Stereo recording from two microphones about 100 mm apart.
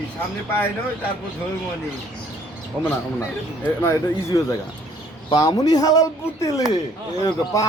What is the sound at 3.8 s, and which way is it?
Speech, 30° left (ahead or behind).